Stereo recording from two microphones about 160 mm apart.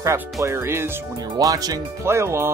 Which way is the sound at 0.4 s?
15° right (ahead or behind).